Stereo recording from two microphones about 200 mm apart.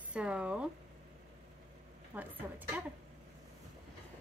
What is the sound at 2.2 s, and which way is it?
Speech, 10° right (ahead or behind).